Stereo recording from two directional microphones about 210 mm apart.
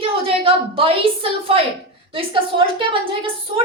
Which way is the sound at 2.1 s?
25° right (ahead or behind).